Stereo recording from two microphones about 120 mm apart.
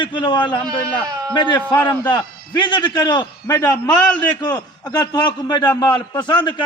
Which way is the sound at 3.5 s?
25° left (ahead or behind).